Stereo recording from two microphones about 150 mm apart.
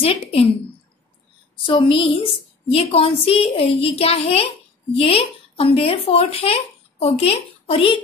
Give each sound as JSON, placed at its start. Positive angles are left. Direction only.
{"t": 0.0, "sound": "a woman's voice", "side_deg": 40}
{"t": 1.7, "sound": "a woman's voice", "side_deg": 35}